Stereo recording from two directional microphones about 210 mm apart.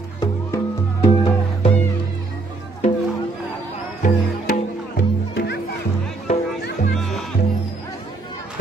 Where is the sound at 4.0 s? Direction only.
40° left (ahead or behind).